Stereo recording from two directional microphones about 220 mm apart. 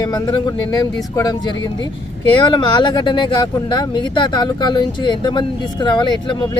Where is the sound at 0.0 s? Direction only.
20° left (ahead or behind).